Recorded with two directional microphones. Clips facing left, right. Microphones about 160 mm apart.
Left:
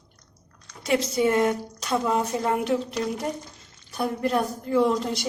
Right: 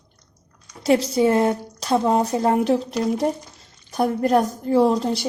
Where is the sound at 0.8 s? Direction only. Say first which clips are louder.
Right 5 dB; 30° right (ahead or behind).